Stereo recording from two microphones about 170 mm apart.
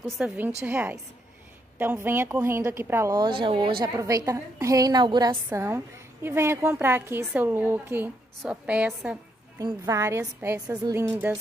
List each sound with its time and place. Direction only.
0.2 s a woman's voice: 10° right (ahead or behind); by 3.7 s 30° right (ahead or behind)
3.8 s a woman's voice: 20° right (ahead or behind)
5.3 s a woman's voice: 15° right (ahead or behind)
9.6 s a woman's voice: 20° right (ahead or behind)